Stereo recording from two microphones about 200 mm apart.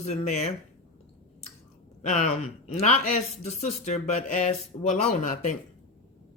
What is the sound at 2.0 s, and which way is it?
Speech, 35° left (ahead or behind).